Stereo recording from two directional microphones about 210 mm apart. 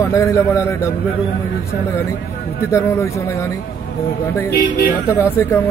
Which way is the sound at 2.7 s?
15° left (ahead or behind).